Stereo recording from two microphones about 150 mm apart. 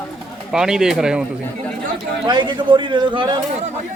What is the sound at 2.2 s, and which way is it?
A man's voice, 30° right (ahead or behind).